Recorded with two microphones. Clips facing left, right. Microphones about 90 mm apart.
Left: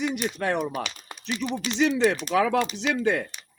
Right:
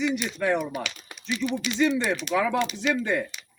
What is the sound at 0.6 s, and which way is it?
Speech, 35° left (ahead or behind).